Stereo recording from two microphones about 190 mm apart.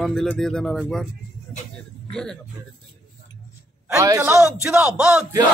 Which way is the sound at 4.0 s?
15° right (ahead or behind).